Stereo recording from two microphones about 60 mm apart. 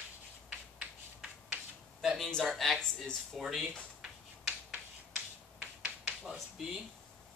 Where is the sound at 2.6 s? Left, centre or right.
Centre.